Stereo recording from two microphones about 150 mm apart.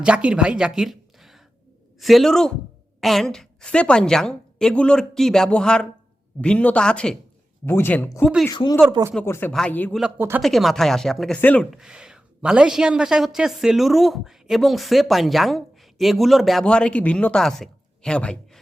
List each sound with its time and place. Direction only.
0.0 s a woman's voice: 5° right (ahead or behind); by 9.5 s 15° left (ahead or behind)
9.5 s speech: 5° left (ahead or behind)
10.2 s speech: 15° right (ahead or behind)
10.4 s a woman's voice: centre (ahead or behind)
11.7 s a woman's voice: 5° right (ahead or behind)